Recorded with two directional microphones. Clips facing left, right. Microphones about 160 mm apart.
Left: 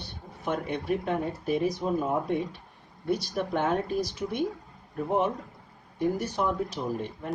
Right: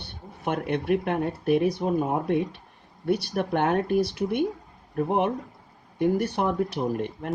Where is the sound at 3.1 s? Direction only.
60° right (ahead or behind).